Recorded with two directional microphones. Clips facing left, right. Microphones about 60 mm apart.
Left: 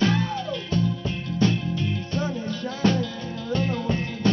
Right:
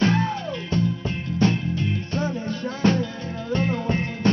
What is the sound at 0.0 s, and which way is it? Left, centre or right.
Music, right.